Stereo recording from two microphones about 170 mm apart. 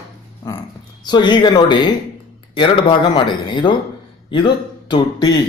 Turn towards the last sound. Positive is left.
turn(degrees=25)  # may be behind; listen again after turning